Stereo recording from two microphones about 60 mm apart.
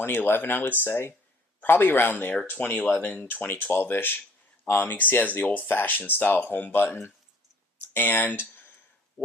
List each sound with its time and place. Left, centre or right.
0.0 s speech: left; by 3.2 s centre
3.2 s speech: left